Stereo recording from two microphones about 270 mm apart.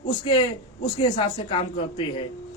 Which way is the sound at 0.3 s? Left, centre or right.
Centre.